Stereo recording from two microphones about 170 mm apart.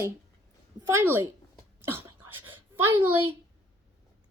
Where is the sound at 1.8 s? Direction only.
15° right (ahead or behind).